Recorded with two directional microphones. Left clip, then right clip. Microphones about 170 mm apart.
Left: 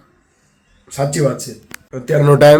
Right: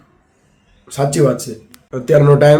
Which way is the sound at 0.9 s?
10° right (ahead or behind).